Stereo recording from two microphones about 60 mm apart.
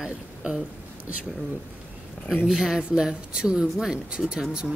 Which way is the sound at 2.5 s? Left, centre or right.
Centre.